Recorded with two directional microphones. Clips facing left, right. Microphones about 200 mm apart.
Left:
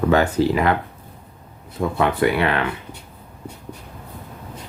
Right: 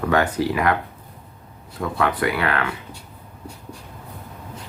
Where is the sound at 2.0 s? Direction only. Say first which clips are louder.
Left 3 dB; 25° left (ahead or behind).